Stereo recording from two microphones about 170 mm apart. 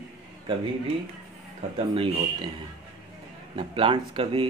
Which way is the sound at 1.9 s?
30° right (ahead or behind).